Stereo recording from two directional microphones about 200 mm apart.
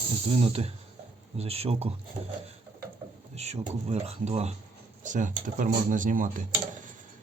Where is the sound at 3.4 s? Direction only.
35° right (ahead or behind).